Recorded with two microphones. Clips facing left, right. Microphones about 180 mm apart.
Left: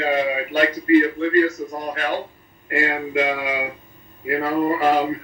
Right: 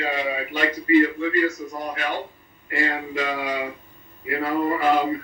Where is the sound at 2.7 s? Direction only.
50° left (ahead or behind).